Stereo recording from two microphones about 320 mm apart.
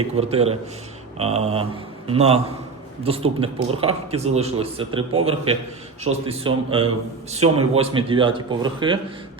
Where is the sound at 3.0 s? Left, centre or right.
Centre.